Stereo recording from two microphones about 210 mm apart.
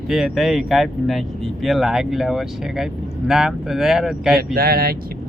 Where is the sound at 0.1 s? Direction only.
Centre (ahead or behind).